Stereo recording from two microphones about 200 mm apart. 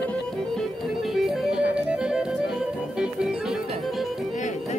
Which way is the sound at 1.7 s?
5° right (ahead or behind).